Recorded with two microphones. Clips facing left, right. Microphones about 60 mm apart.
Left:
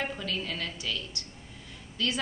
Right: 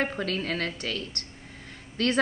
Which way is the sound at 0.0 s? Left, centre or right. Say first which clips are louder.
Right 5 dB; right.